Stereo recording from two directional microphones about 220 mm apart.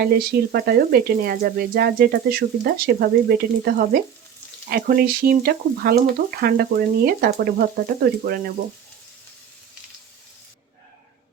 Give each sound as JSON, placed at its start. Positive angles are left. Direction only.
{"t": 0.0, "sound": "speech", "side_deg": -45}